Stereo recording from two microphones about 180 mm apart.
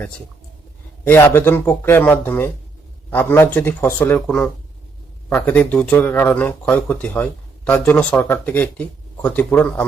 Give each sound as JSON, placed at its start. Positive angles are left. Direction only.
{"t": 1.0, "sound": "speech", "side_deg": 10}